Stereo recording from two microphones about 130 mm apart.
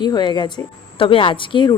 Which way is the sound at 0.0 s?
35° left (ahead or behind).